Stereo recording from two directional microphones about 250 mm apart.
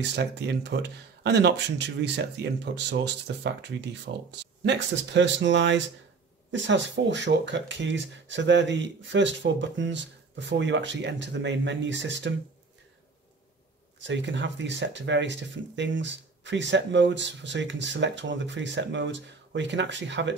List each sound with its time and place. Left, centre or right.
0.1 s speech: right
13.9 s speech: right